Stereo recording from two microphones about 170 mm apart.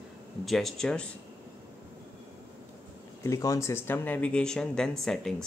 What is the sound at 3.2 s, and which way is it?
Speech, 20° left (ahead or behind).